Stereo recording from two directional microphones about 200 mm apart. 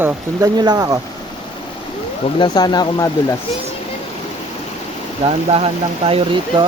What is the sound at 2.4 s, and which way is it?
Speech, 20° left (ahead or behind).